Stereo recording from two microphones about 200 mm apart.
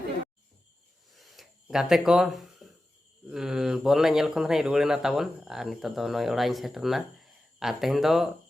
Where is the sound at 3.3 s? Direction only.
5° right (ahead or behind).